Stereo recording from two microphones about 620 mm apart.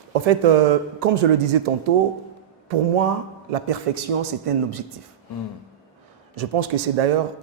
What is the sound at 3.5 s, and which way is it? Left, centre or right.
A man's voice, right.